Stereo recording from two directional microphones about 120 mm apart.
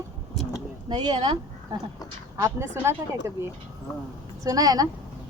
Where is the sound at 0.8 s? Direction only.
35° right (ahead or behind).